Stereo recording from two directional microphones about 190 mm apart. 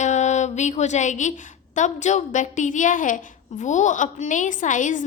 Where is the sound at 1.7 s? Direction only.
40° left (ahead or behind).